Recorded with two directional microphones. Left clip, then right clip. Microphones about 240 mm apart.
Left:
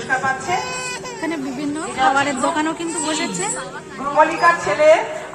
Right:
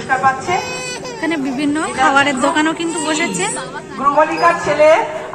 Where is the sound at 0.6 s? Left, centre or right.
Right.